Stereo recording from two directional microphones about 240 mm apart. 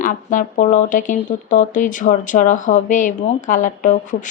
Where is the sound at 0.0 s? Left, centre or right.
Left.